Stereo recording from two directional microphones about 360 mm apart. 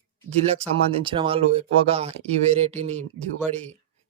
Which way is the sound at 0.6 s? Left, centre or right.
Centre.